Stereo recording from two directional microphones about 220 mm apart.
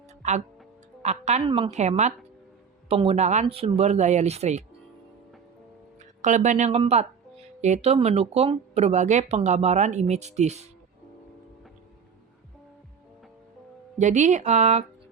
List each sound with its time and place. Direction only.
0.1 s music: 30° right (ahead or behind)
1.0 s speech: 30° right (ahead or behind)
6.0 s speech: 35° right (ahead or behind)
14.0 s speech: 35° right (ahead or behind)